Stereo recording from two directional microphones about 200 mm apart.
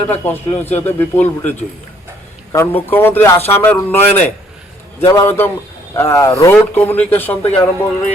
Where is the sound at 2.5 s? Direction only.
10° left (ahead or behind).